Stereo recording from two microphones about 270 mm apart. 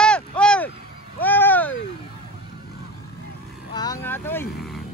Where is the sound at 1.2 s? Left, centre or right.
Centre.